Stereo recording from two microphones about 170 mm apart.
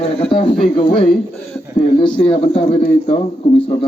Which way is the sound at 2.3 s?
35° left (ahead or behind).